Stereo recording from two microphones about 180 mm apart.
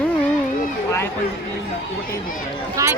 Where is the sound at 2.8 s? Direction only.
20° right (ahead or behind).